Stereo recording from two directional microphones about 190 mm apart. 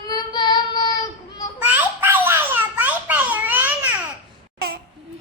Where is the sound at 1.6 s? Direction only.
10° right (ahead or behind).